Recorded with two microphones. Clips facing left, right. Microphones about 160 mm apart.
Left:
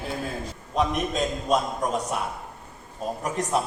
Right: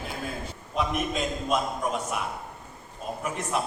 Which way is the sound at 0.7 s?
35° left (ahead or behind).